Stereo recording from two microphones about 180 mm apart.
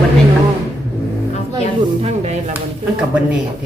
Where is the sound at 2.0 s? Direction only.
35° right (ahead or behind).